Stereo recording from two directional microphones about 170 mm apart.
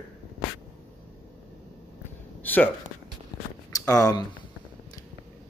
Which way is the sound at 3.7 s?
20° left (ahead or behind).